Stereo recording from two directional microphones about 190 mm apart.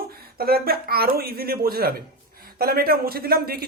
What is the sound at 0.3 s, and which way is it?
Speech, 55° right (ahead or behind).